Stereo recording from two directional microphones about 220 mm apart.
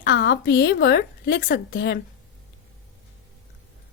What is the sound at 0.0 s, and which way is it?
A woman's voice, 45° left (ahead or behind).